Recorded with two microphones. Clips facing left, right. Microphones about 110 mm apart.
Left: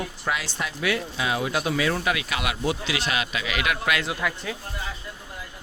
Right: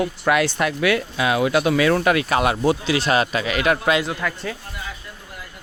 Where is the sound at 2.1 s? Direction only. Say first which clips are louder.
Right 9 dB; 45° right (ahead or behind).